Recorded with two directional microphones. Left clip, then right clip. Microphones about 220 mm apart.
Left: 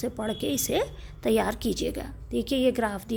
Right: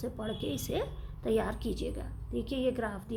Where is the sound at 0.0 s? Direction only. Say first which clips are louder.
Left 7 dB; 35° left (ahead or behind).